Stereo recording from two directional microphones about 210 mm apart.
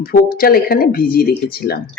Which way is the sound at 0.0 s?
45° left (ahead or behind).